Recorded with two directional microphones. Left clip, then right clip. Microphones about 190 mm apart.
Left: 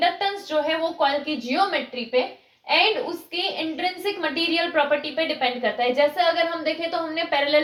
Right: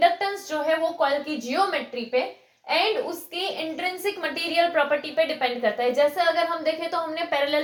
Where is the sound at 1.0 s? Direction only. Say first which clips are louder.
Left 1 dB; 25° right (ahead or behind).